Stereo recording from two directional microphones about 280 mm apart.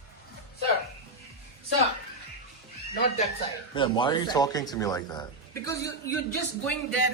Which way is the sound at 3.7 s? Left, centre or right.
Centre.